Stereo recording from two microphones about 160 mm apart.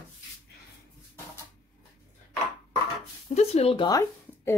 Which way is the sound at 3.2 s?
40° left (ahead or behind).